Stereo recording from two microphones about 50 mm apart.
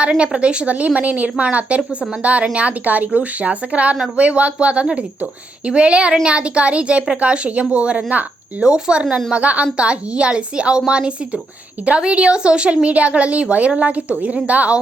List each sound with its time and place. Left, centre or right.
0.2 s speech: right
9.3 s speech: right